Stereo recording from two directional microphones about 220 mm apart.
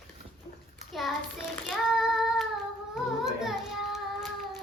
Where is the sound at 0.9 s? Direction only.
Centre (ahead or behind).